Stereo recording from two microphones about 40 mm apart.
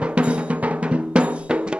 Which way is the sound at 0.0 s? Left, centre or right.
Right.